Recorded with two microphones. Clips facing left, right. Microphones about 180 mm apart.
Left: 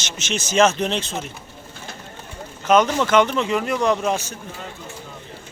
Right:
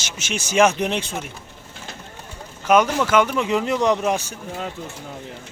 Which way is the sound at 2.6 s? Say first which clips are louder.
Even; 10° right (ahead or behind).